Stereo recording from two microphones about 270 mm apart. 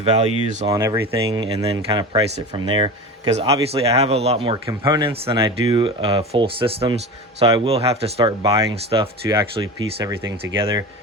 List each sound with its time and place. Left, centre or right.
0.0 s speech: right
0.6 s speech: centre